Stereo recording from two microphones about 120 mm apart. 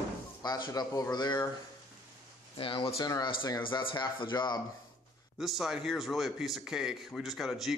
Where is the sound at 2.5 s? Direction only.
45° left (ahead or behind).